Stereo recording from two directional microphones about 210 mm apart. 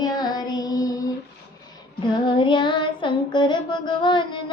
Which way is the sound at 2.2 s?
25° left (ahead or behind).